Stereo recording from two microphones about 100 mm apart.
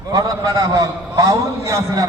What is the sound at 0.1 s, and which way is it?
A man's voice, 35° right (ahead or behind).